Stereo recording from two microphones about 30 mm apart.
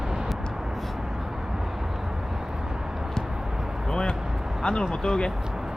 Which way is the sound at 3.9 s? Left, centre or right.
Left.